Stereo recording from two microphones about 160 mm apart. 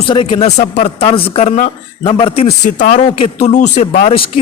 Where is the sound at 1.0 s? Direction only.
35° left (ahead or behind).